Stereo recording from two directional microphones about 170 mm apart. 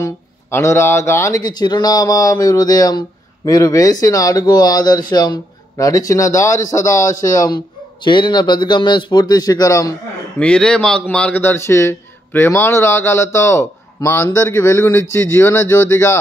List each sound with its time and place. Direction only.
0.0 s speech: 15° left (ahead or behind)
10.4 s a man's voice: 5° left (ahead or behind)